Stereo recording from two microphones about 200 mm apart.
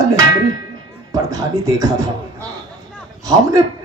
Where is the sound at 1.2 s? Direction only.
15° right (ahead or behind).